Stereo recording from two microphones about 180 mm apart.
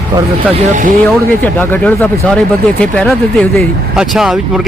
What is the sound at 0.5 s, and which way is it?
Speech, 45° right (ahead or behind).